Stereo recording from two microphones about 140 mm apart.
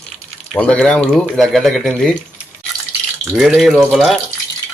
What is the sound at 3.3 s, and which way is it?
Speech, centre (ahead or behind).